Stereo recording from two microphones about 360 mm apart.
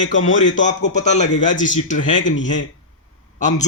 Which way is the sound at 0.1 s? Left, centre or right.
Left.